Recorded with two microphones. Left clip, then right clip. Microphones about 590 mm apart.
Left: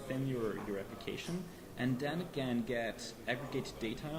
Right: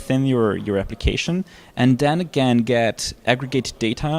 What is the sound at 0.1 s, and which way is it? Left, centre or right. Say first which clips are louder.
Speech: right 19 dB; right.